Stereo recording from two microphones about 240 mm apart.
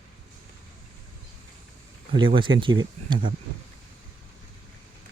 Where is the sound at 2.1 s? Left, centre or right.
Right.